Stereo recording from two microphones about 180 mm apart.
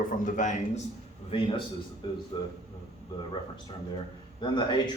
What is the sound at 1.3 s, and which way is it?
A man's voice, 30° left (ahead or behind).